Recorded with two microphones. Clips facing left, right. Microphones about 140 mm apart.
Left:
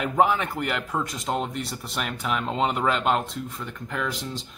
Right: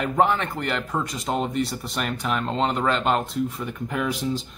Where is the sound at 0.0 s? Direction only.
5° left (ahead or behind).